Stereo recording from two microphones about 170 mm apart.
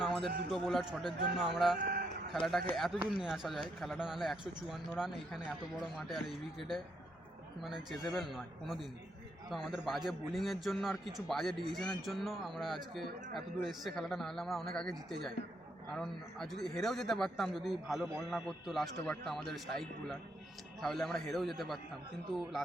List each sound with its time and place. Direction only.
0.5 s a man's voice: centre (ahead or behind)
1.8 s chicken: 60° right (ahead or behind)
2.3 s a man's voice: centre (ahead or behind)